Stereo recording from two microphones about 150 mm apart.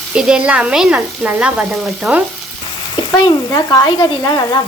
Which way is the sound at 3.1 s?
25° left (ahead or behind).